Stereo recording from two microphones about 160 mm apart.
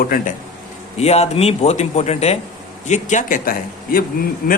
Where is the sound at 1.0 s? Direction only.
40° left (ahead or behind).